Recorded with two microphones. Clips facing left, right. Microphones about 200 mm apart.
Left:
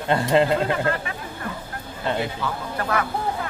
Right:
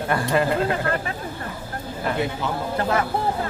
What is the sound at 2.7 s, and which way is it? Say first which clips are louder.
Speech: right 2 dB; 25° right (ahead or behind).